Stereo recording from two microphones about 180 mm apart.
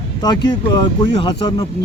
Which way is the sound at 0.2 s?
25° left (ahead or behind).